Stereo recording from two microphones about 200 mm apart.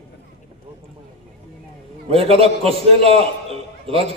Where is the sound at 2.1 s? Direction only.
30° right (ahead or behind).